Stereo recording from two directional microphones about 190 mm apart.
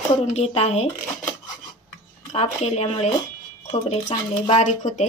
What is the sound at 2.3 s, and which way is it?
Speech, 35° left (ahead or behind).